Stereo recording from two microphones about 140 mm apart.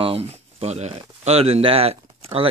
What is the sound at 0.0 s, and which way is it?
Speech, 45° right (ahead or behind).